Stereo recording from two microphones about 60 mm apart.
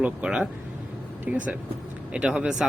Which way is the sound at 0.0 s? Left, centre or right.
Centre.